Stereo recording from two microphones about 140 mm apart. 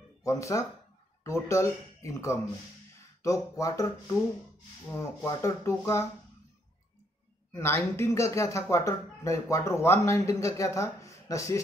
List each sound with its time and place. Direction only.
0.2 s speech: 20° left (ahead or behind)
7.5 s speech: 20° left (ahead or behind)